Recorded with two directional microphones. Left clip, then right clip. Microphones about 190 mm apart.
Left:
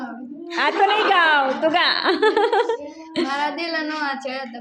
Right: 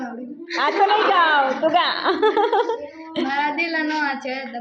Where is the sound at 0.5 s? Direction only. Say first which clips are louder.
Even; 25° left (ahead or behind).